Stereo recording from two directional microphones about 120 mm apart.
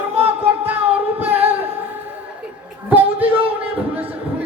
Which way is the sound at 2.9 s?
15° right (ahead or behind).